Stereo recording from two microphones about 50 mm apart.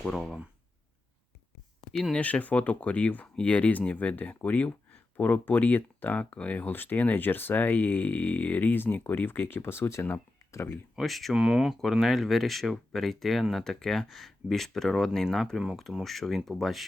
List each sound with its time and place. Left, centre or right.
1.9 s speech: centre
2.1 s speech: left
11.0 s speech: centre
11.3 s speech: centre
11.7 s speech: centre